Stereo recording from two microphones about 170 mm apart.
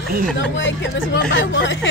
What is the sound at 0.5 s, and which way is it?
Speech, 90° left.